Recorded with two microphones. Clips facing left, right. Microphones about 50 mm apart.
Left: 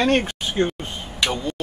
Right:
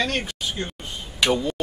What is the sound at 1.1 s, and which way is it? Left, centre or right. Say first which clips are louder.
Speech: right 3 dB; centre.